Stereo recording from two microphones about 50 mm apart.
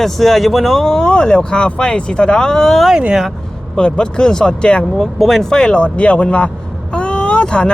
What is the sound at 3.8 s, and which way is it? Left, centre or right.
Speech, centre.